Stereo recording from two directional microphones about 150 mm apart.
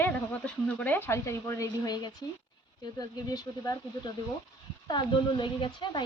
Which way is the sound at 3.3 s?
25° left (ahead or behind).